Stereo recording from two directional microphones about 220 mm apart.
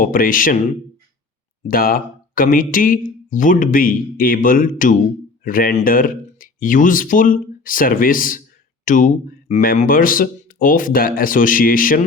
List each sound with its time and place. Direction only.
0.0 s speech: 40° left (ahead or behind)
1.6 s speech: 40° left (ahead or behind)